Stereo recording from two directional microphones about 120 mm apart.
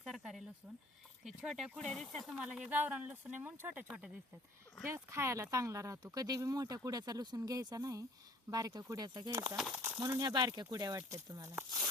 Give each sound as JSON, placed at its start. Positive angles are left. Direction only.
{"t": 0.0, "sound": "a sound", "side_deg": 0}
{"t": 1.2, "sound": "speech", "side_deg": -5}
{"t": 2.5, "sound": "speech", "side_deg": -10}
{"t": 4.9, "sound": "speech", "side_deg": -20}
{"t": 9.6, "sound": "speech", "side_deg": 0}
{"t": 10.0, "sound": "speech", "side_deg": -30}